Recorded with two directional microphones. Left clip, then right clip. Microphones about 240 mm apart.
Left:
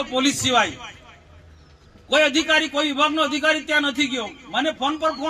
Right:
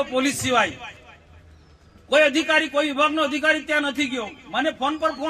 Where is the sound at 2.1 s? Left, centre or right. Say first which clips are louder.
Even; centre.